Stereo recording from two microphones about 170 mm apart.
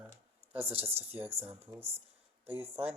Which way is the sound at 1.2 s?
10° right (ahead or behind).